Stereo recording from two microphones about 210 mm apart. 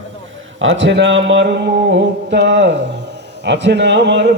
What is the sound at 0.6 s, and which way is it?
Speech, 65° right (ahead or behind).